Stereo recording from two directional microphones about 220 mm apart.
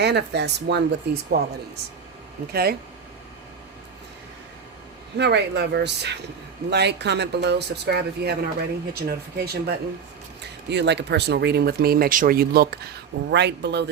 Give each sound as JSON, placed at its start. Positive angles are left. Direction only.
{"t": 0.0, "sound": "speech", "side_deg": -50}
{"t": 2.5, "sound": "speech", "side_deg": -45}
{"t": 5.1, "sound": "speech", "side_deg": -50}